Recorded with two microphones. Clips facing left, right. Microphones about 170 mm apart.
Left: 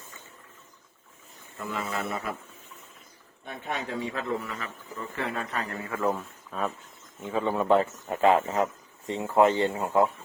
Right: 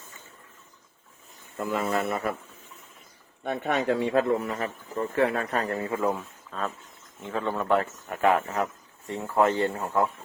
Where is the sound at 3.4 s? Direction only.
65° right (ahead or behind).